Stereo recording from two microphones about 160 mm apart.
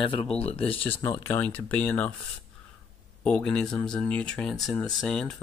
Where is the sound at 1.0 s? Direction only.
20° left (ahead or behind).